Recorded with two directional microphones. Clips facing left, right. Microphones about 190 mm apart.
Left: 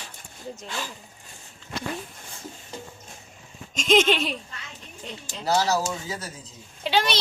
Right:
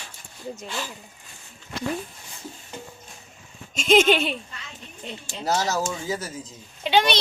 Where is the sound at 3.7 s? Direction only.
5° right (ahead or behind).